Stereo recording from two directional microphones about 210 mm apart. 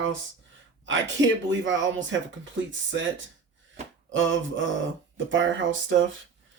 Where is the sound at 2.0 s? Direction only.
60° right (ahead or behind).